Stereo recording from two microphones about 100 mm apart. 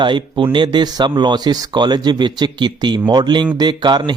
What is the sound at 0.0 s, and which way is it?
Speech, 55° right (ahead or behind).